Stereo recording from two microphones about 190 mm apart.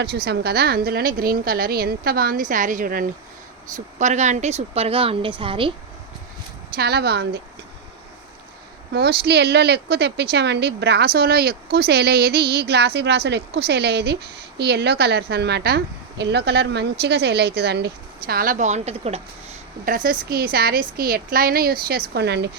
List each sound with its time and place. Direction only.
0.3 s a woman's voice: 55° right (ahead or behind); by 5.7 s 25° right (ahead or behind)
6.7 s speech: 55° right (ahead or behind)
8.9 s speech: 60° right (ahead or behind); by 19.2 s 35° right (ahead or behind)
19.8 s a woman's voice: 45° right (ahead or behind); by 22.4 s 60° right (ahead or behind)